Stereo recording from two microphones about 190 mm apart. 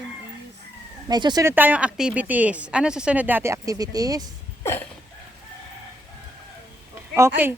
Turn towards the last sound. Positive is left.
turn(degrees=-10)  # may be behind; listen again after turning